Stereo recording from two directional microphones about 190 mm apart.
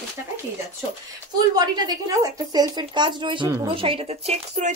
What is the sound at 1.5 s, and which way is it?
A woman's voice, 20° right (ahead or behind).